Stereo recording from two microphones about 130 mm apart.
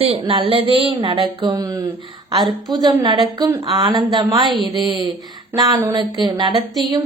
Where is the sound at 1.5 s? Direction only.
25° right (ahead or behind).